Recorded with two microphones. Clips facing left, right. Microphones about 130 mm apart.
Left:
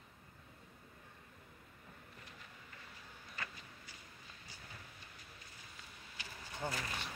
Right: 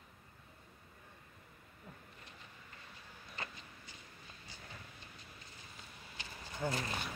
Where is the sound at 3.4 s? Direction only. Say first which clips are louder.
Right 1 dB; 25° right (ahead or behind).